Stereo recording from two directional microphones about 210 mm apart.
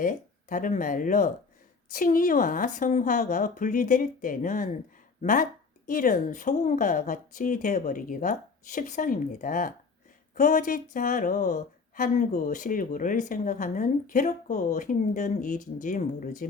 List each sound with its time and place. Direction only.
0.0 s speech: 40° left (ahead or behind)